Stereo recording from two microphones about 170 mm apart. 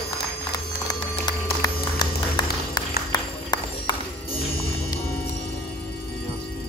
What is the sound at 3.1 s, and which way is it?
Music, 25° left (ahead or behind).